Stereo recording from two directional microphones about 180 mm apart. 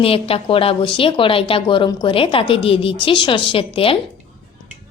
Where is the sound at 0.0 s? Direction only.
30° left (ahead or behind).